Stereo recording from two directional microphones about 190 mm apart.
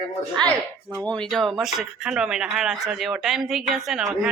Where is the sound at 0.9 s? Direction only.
5° left (ahead or behind).